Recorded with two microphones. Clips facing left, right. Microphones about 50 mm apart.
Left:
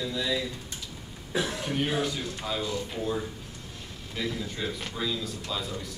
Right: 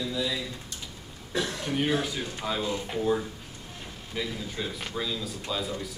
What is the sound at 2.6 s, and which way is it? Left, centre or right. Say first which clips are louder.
Speech: right 1 dB; right.